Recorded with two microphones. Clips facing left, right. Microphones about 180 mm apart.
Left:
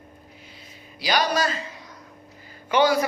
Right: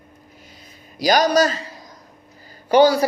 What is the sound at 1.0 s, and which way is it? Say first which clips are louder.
A man's voice: right 7 dB; 45° right (ahead or behind).